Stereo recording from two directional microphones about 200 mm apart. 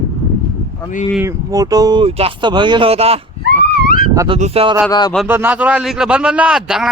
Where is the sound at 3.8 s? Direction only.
45° left (ahead or behind).